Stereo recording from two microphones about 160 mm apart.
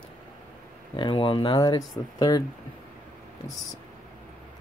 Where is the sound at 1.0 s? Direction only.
30° left (ahead or behind).